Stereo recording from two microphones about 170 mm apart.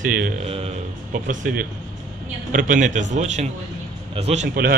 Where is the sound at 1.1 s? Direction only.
50° right (ahead or behind).